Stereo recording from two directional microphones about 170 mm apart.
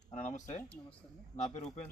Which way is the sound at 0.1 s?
45° left (ahead or behind).